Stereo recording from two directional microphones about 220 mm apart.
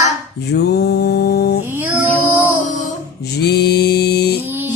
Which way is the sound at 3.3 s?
45° left (ahead or behind).